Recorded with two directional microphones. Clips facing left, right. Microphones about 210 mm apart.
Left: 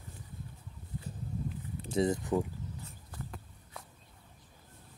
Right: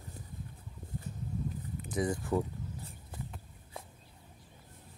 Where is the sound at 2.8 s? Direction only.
30° right (ahead or behind).